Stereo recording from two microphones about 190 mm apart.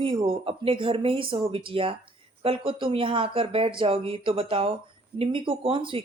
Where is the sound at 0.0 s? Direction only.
25° right (ahead or behind).